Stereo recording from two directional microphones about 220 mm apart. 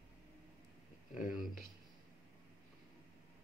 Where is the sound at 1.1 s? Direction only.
35° left (ahead or behind).